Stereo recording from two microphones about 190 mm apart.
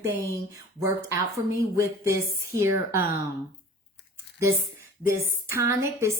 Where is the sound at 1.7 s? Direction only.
15° right (ahead or behind).